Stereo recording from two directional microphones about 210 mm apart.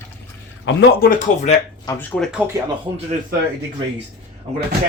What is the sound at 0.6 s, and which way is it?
Speech, 50° left (ahead or behind).